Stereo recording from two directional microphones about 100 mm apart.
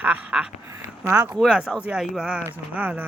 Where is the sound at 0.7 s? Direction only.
25° right (ahead or behind).